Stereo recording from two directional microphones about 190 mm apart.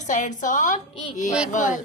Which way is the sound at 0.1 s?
40° left (ahead or behind).